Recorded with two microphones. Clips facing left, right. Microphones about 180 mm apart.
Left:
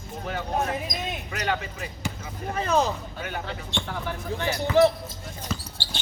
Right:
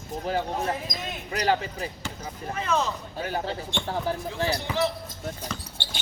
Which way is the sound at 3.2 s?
35° right (ahead or behind).